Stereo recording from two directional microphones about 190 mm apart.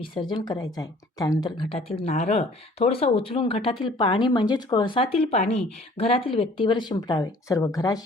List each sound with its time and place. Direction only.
0.0 s a woman's voice: 25° left (ahead or behind)